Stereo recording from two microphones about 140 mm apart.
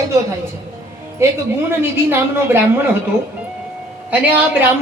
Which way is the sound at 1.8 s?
15° right (ahead or behind).